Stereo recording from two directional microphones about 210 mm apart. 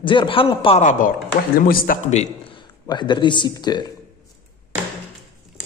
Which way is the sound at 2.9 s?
20° left (ahead or behind).